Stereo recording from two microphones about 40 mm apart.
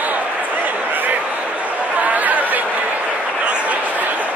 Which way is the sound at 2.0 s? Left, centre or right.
Right.